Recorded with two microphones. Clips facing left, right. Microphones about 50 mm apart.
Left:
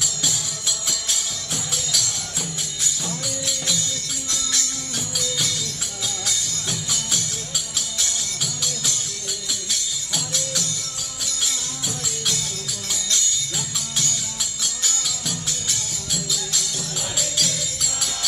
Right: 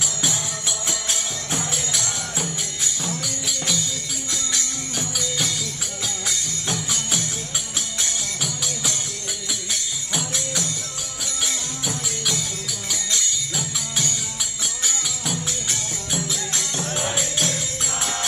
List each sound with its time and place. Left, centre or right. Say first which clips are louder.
0.3 s music: right 2 dB; right
3.4 s music: right 2 dB; centre
4.3 s music: left 1 dB; centre
6.0 s music: even; right
6.9 s music: right 1 dB; centre
13.1 s music: left 1 dB; centre; by 17.6 s right